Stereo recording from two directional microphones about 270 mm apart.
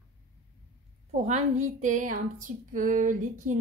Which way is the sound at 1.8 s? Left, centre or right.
Right.